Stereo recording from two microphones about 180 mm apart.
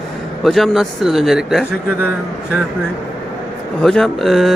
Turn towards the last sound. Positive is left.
turn(degrees=0)  # may be behind; listen again after turning